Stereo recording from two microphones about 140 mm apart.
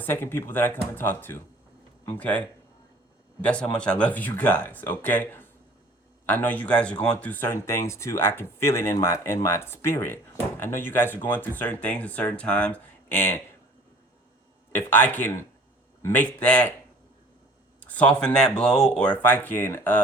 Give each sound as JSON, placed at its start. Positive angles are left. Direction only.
{"t": 0.0, "sound": "speech", "side_deg": 15}
{"t": 3.4, "sound": "speech", "side_deg": 10}
{"t": 14.7, "sound": "speech", "side_deg": 15}
{"t": 17.7, "sound": "speech", "side_deg": 10}